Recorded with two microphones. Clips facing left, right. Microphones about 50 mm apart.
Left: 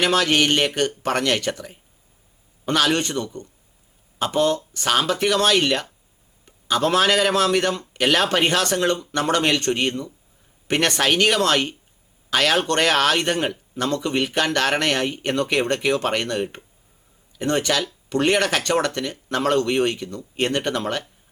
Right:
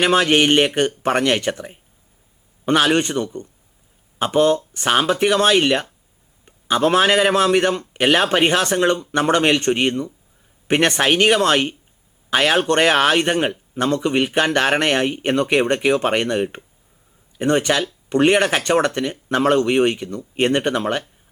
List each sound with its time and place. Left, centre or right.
0.0 s speech: right